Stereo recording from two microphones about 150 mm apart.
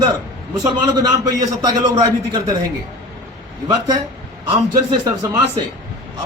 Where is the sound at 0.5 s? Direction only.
30° right (ahead or behind).